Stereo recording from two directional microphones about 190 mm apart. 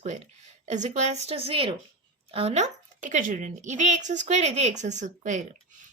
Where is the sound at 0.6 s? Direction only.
35° right (ahead or behind).